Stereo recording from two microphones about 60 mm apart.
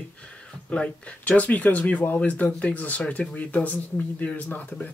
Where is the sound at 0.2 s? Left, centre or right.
Centre.